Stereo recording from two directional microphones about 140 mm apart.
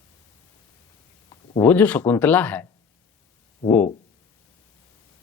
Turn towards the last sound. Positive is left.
turn(degrees=15)  # may be behind; listen again after turning